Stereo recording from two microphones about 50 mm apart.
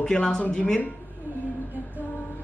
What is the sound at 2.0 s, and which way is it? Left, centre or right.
Music, left.